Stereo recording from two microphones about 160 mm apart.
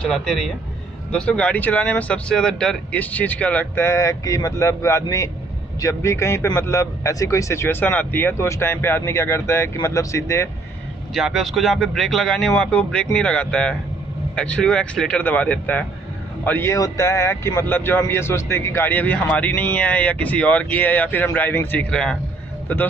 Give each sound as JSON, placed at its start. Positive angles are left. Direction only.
{"t": 0.0, "sound": "speech", "side_deg": 5}
{"t": 11.1, "sound": "speech", "side_deg": 0}